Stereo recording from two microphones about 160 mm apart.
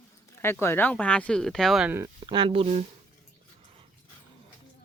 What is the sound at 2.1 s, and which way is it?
Speech, 30° right (ahead or behind).